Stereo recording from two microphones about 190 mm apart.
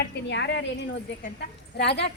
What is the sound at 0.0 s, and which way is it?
Speech, 65° left (ahead or behind).